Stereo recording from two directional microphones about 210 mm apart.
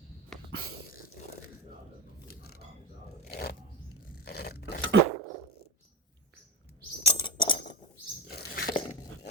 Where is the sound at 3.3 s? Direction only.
45° left (ahead or behind).